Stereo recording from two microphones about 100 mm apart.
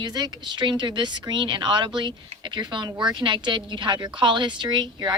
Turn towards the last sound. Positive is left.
turn(degrees=-45)  # may be behind; listen again after turning